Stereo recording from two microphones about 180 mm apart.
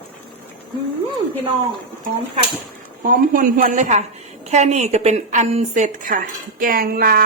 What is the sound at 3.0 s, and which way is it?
A woman's voice, 50° right (ahead or behind).